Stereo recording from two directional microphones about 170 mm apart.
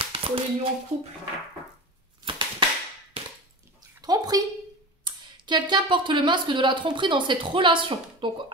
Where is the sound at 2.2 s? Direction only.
30° right (ahead or behind).